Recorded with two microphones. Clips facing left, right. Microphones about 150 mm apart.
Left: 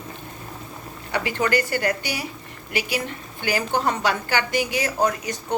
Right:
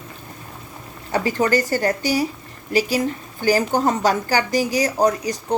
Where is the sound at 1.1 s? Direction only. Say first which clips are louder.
Right 4 dB; 40° right (ahead or behind).